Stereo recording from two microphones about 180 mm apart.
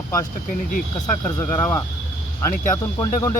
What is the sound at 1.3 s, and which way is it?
Speech, 15° left (ahead or behind).